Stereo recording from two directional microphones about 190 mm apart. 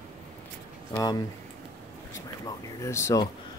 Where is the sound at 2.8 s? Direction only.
15° left (ahead or behind).